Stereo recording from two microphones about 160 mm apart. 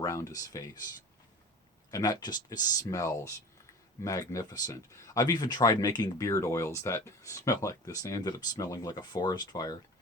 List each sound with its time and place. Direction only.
0.0 s speech: 20° left (ahead or behind)
1.9 s speech: 25° left (ahead or behind)